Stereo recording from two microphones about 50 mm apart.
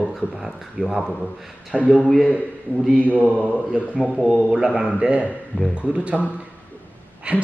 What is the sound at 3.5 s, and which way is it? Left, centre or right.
Speech, left.